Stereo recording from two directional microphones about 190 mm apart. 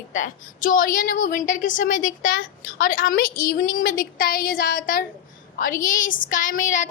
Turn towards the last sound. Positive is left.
turn(degrees=40)  # may be behind; listen again after turning